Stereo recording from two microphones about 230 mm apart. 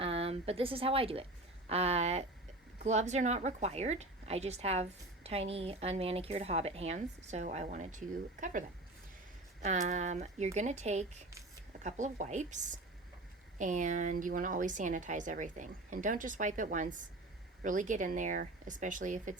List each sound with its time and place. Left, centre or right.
0.0 s a woman's voice: right